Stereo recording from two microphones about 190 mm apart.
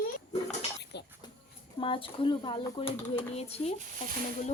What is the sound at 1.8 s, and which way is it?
Speech, 25° left (ahead or behind).